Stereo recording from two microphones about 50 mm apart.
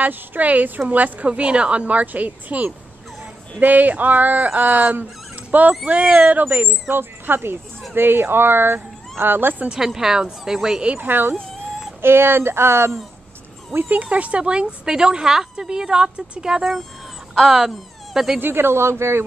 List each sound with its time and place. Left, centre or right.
0.0 s a woman's voice: right
6.7 s speech: right
9.7 s a woman's voice: centre
11.0 s speech: right
13.7 s a woman's voice: right; by 16.6 s centre
17.4 s speech: centre
18.4 s speech: right